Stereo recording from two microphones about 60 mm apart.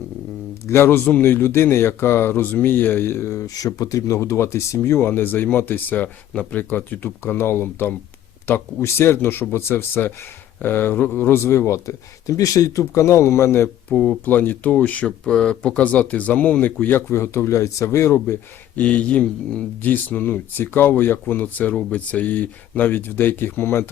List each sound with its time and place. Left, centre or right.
0.7 s speech: left
3.4 s speech: left
12.8 s speech: left
13.9 s speech: centre
14.3 s speech: left
15.2 s speech: centre
17.1 s speech: left
18.8 s speech: left